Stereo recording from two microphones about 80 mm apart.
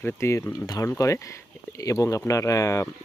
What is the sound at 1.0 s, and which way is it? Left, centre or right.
Speech, left.